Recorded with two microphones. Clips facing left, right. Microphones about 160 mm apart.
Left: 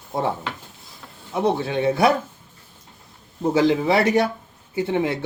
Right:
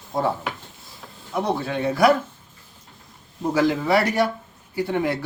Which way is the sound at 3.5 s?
25° left (ahead or behind).